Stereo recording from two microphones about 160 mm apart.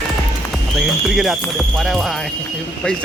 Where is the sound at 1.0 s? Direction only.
Centre (ahead or behind).